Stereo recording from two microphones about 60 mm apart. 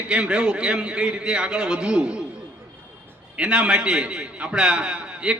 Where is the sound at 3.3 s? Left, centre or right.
Centre.